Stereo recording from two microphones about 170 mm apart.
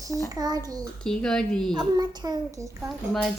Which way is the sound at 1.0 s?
5° left (ahead or behind).